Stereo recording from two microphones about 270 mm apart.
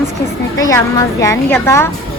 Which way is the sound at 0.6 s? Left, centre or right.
Centre.